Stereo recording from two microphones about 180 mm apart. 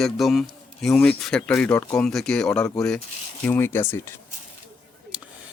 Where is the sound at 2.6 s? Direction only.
20° left (ahead or behind).